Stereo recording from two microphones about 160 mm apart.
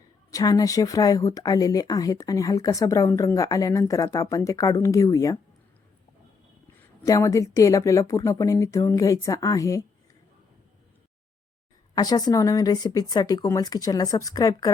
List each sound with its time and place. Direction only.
0.3 s speech: 20° left (ahead or behind)
7.0 s speech: 20° left (ahead or behind)
11.9 s speech: 25° left (ahead or behind)